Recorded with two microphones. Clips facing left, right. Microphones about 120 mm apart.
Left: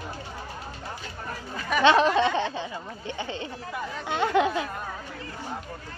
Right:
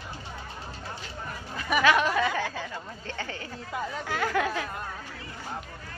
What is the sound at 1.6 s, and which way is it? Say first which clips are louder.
Speech: left 1 dB; 10° right (ahead or behind).